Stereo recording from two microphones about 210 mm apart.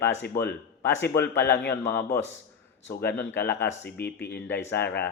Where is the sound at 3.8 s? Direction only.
55° left (ahead or behind).